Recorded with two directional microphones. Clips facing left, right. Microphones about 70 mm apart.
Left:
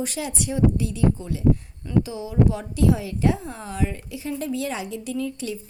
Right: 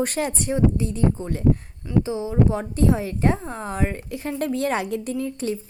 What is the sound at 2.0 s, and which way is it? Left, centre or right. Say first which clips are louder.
A woman's voice: right 2 dB; right.